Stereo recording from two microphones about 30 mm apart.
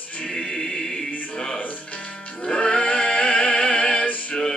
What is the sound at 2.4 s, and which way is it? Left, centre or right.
Music, left.